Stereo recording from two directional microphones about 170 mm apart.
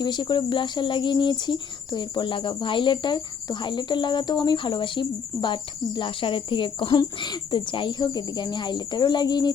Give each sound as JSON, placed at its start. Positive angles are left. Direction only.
{"t": 0.0, "sound": "speech", "side_deg": 25}